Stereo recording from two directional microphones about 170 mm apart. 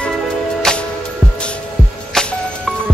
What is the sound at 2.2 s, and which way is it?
Music, 5° left (ahead or behind).